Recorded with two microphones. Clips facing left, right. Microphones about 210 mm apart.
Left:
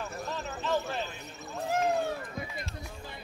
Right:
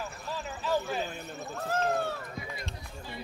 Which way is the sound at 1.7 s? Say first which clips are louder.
Left 1 dB; 15° left (ahead or behind).